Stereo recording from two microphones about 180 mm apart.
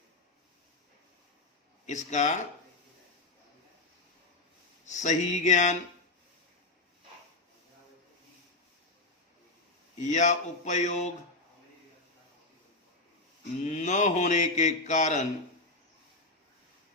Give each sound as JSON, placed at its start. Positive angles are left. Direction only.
{"t": 1.9, "sound": "mantra", "side_deg": 40}
{"t": 4.9, "sound": "mantra", "side_deg": 40}
{"t": 10.0, "sound": "mantra", "side_deg": 40}
{"t": 13.7, "sound": "mantra", "side_deg": 40}